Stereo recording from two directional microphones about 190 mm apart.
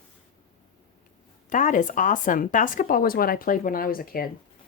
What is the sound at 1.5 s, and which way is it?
Speech, 40° left (ahead or behind).